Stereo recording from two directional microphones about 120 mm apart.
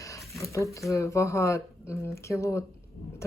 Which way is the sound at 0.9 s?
25° left (ahead or behind).